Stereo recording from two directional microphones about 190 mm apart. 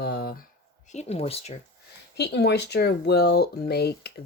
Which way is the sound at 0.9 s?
35° left (ahead or behind).